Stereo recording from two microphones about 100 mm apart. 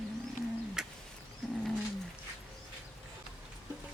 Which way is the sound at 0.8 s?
5° right (ahead or behind).